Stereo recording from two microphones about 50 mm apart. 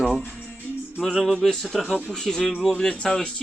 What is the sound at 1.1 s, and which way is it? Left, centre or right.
Speech, centre.